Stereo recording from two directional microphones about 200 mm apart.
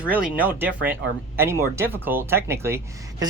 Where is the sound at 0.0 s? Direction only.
5° right (ahead or behind).